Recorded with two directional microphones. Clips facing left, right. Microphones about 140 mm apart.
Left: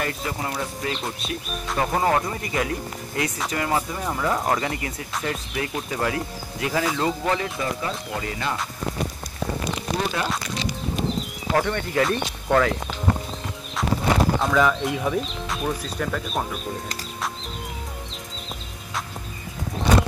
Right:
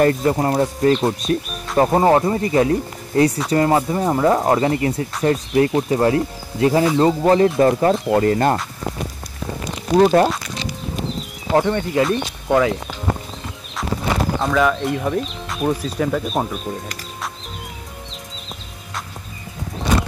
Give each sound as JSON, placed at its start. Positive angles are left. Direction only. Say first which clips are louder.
{"t": 0.0, "sound": "speech", "louder": "right 12 dB", "side_deg": -45}
{"t": 9.9, "sound": "speech", "louder": "right 15 dB", "side_deg": -45}
{"t": 11.5, "sound": "speech", "louder": "right 5 dB", "side_deg": -20}
{"t": 14.4, "sound": "speech", "louder": "right 3 dB", "side_deg": 0}